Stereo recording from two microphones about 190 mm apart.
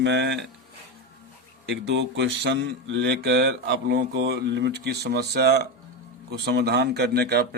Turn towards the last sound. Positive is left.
turn(degrees=-60)  # may be behind; listen again after turning